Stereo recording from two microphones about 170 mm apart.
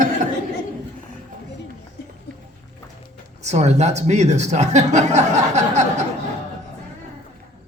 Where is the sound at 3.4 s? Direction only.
40° right (ahead or behind).